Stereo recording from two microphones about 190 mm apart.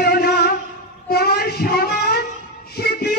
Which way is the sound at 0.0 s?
55° left (ahead or behind).